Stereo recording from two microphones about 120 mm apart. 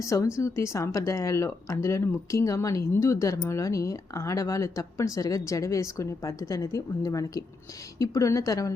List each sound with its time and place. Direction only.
0.0 s speech: 25° left (ahead or behind)